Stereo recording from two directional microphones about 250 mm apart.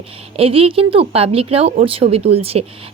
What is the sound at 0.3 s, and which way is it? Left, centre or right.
A woman's voice, right.